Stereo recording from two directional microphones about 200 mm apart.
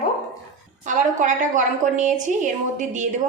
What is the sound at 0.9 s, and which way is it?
A woman's voice, 40° right (ahead or behind).